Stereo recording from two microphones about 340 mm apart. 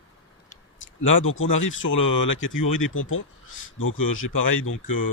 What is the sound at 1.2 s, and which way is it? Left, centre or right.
Speech, left.